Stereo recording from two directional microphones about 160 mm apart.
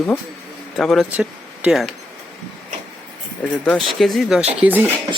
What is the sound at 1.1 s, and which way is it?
Speech, 10° right (ahead or behind).